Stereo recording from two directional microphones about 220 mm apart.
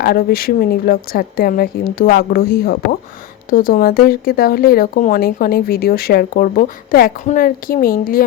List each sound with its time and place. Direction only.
0.0 s speech: 45° left (ahead or behind)